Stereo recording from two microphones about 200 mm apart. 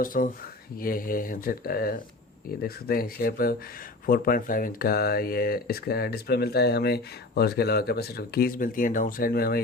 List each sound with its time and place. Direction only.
0.0 s speech: 45° left (ahead or behind)